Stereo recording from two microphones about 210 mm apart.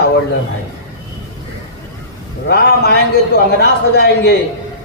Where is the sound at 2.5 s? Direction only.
50° left (ahead or behind).